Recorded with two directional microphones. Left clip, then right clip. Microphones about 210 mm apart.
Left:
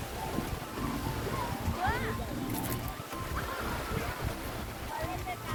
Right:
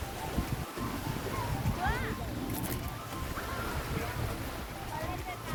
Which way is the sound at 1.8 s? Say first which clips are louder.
Left 2 dB; 40° right (ahead or behind).